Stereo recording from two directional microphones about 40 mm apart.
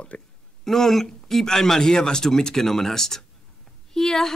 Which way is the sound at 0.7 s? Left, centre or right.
Centre.